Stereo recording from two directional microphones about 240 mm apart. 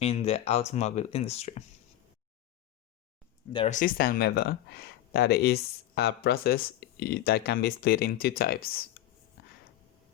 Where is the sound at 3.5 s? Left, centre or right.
Left.